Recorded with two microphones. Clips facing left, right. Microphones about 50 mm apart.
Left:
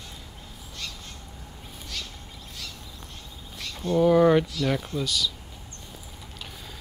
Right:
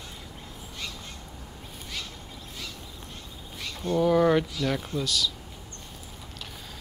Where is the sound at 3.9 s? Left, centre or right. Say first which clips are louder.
Left 3 dB; centre.